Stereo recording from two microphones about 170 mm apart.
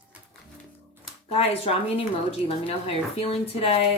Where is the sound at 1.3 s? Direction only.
35° left (ahead or behind).